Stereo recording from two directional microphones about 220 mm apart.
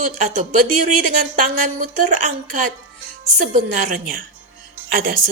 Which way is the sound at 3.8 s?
40° right (ahead or behind).